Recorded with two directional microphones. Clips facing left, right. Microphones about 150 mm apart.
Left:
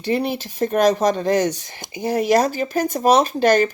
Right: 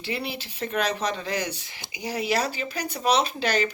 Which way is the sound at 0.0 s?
50° left (ahead or behind).